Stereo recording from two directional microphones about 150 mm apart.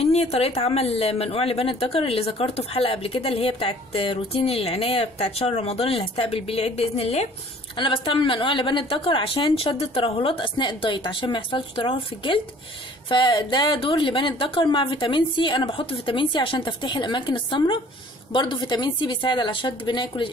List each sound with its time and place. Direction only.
0.0 s a woman's voice: 40° left (ahead or behind)
7.7 s a woman's voice: 35° left (ahead or behind)